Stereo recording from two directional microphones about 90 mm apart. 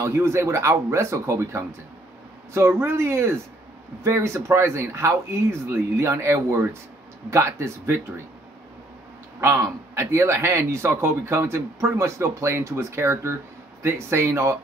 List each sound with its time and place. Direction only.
0.0 s a man's voice: 30° right (ahead or behind)
9.4 s a man's voice: 30° right (ahead or behind)